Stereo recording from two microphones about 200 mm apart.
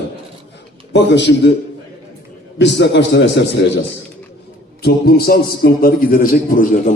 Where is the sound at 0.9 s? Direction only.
60° left (ahead or behind).